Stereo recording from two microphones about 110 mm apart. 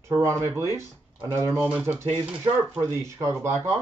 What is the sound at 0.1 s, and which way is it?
A man's voice, 25° right (ahead or behind).